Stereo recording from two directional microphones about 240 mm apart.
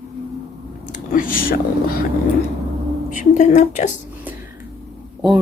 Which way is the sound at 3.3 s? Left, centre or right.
Left.